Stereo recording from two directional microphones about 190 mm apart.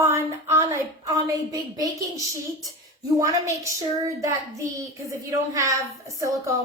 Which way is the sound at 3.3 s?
15° right (ahead or behind).